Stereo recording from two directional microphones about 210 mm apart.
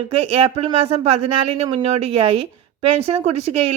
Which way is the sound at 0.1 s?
25° right (ahead or behind).